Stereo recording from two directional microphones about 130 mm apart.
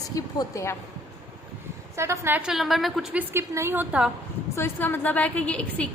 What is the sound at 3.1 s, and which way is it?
Speech, 20° right (ahead or behind).